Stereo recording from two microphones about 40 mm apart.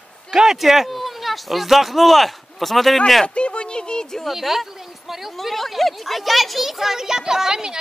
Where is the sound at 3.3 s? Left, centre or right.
Left.